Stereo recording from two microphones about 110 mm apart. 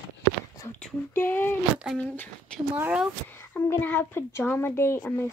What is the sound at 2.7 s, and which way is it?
Speech, 15° right (ahead or behind).